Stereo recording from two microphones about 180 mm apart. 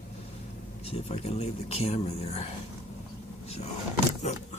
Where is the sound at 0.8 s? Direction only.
30° left (ahead or behind).